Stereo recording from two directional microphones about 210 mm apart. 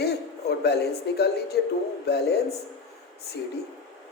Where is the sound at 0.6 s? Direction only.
50° left (ahead or behind).